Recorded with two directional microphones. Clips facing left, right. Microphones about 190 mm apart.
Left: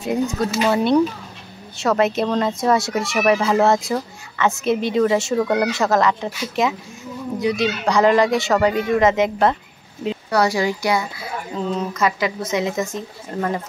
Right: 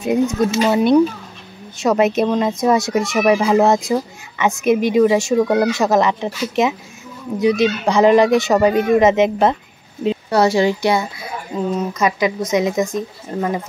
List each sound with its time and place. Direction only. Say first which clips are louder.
0.0 s a child's voice: right 4 dB; 20° right (ahead or behind)